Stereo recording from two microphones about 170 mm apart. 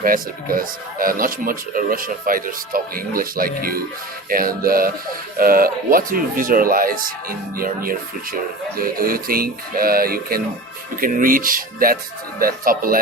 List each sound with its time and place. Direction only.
0.0 s speech: 55° right (ahead or behind)